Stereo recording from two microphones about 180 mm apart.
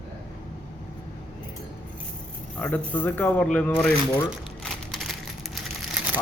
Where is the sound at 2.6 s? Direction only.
5° left (ahead or behind).